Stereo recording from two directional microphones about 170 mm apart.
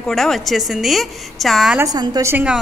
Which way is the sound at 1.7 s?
20° right (ahead or behind).